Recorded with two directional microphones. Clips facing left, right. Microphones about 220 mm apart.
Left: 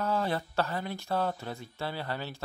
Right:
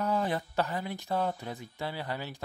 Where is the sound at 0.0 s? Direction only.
15° right (ahead or behind).